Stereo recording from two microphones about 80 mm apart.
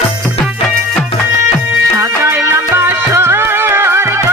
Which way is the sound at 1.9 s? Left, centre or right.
Right.